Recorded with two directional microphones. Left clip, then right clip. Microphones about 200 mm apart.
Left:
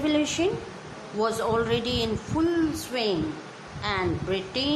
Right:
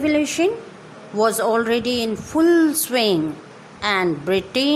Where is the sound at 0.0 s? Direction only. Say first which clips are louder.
Right 6 dB; 25° right (ahead or behind).